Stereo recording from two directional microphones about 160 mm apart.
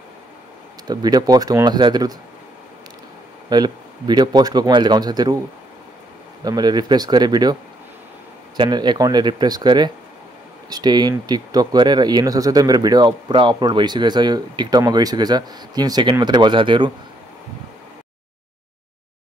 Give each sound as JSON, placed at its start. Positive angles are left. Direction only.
{"t": 0.8, "sound": "speech", "side_deg": -25}
{"t": 3.4, "sound": "speech", "side_deg": -25}
{"t": 6.4, "sound": "speech", "side_deg": -25}
{"t": 8.5, "sound": "speech", "side_deg": -30}